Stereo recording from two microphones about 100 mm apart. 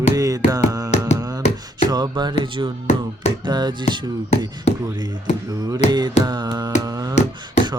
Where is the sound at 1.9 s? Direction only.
40° right (ahead or behind).